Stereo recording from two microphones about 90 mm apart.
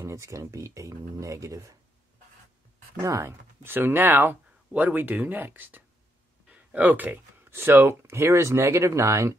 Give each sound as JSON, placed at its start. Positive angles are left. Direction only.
{"t": 0.0, "sound": "speech", "side_deg": -35}
{"t": 3.0, "sound": "speech", "side_deg": -35}